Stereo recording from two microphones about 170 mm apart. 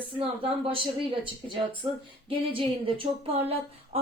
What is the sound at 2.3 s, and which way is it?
A woman's voice, 30° right (ahead or behind).